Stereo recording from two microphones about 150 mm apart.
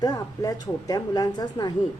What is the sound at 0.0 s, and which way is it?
Speech, 25° left (ahead or behind).